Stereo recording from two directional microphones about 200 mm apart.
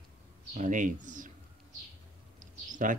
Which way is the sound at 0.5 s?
40° right (ahead or behind).